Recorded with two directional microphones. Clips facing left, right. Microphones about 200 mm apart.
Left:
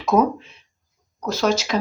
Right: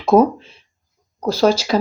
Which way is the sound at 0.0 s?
30° right (ahead or behind).